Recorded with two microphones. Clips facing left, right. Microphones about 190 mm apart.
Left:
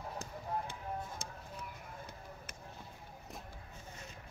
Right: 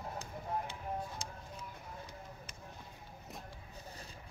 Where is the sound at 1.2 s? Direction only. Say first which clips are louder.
Right 1 dB; 55° left (ahead or behind).